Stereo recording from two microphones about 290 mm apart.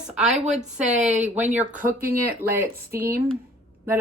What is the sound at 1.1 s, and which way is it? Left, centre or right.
Speech, right.